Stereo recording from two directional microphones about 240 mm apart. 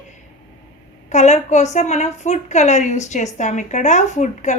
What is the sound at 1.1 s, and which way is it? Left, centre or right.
A woman's voice, left.